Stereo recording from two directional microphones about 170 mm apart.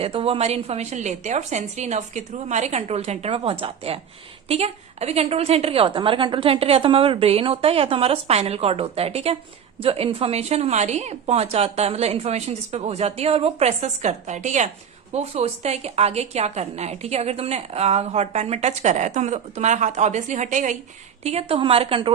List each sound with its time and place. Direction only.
0.0 s a woman's voice: 35° right (ahead or behind)
21.2 s a woman's voice: 35° right (ahead or behind)